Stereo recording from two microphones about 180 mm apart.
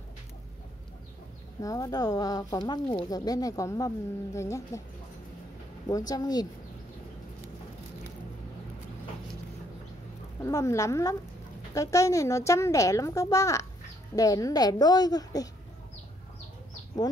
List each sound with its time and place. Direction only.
1.6 s speech: 20° left (ahead or behind)
5.9 s speech: 20° left (ahead or behind)
10.4 s a woman's voice: 15° left (ahead or behind)